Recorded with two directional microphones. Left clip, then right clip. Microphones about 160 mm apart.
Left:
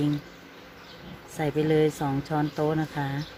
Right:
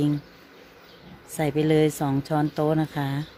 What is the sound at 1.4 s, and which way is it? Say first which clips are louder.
Speech: right 2 dB; 70° right (ahead or behind).